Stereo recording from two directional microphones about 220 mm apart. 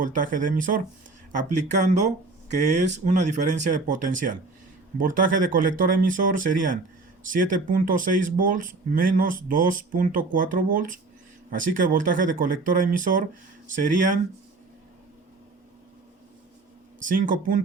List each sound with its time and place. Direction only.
0.0 s speech: 35° right (ahead or behind)
17.1 s speech: 40° right (ahead or behind)